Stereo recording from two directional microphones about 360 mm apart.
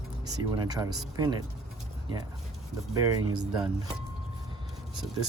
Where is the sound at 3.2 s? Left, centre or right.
Right.